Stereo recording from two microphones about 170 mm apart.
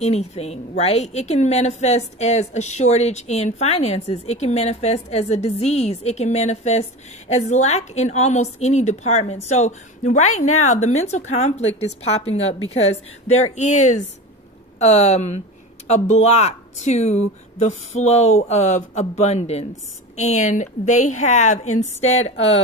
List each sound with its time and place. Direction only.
0.0 s a woman's voice: 40° left (ahead or behind)